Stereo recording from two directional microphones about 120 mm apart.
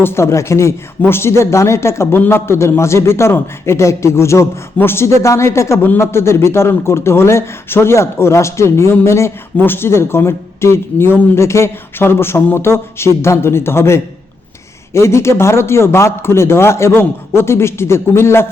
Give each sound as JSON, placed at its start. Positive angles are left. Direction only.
{"t": 0.0, "sound": "speech", "side_deg": 20}